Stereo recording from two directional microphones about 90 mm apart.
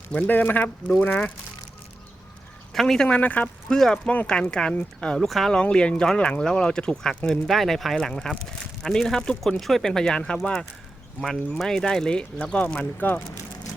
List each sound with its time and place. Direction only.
0.1 s speech: 15° left (ahead or behind)
2.7 s speech: 5° left (ahead or behind)